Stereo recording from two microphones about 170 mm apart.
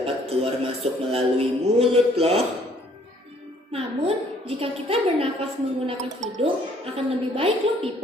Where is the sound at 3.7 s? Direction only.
35° right (ahead or behind).